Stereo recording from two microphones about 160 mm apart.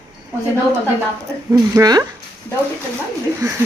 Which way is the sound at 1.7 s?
20° right (ahead or behind).